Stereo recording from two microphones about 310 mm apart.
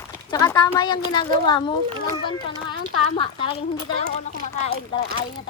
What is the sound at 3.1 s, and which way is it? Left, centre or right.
Speech, centre.